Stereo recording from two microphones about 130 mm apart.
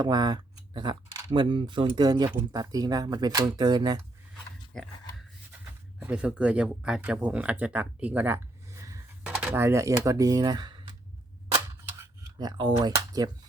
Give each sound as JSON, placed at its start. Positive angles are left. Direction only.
{"t": 0.0, "sound": "speech", "side_deg": -30}
{"t": 4.7, "sound": "a sound", "side_deg": 0}
{"t": 6.0, "sound": "speech", "side_deg": -10}
{"t": 12.2, "sound": "speech", "side_deg": -30}